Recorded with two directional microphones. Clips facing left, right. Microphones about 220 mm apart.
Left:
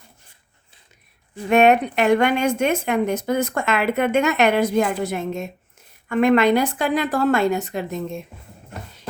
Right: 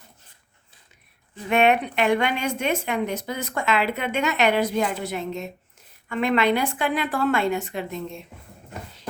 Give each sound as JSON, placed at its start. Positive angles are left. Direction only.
{"t": 1.5, "sound": "a woman's voice", "side_deg": 45}